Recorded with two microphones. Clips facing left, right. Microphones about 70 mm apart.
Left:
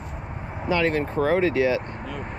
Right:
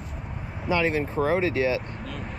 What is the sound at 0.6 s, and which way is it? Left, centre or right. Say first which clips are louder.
Speech: left 2 dB; left.